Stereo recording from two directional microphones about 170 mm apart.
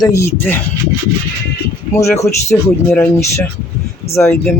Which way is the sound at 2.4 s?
10° left (ahead or behind).